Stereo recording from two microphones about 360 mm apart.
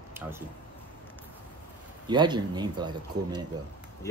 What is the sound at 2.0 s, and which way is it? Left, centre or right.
Speech, centre.